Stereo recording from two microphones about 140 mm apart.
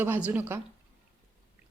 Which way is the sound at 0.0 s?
15° right (ahead or behind).